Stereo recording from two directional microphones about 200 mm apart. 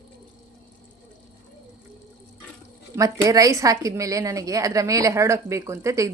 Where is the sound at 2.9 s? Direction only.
15° right (ahead or behind).